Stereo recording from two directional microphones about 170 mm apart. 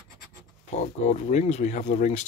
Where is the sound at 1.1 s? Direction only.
40° left (ahead or behind).